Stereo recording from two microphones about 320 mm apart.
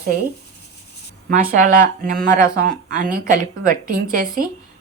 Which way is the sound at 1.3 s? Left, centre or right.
Right.